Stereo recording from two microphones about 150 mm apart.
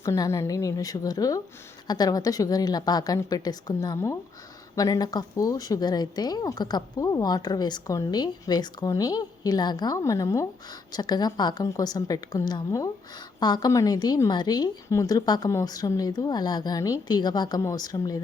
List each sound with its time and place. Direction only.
0.0 s a woman's voice: 20° left (ahead or behind)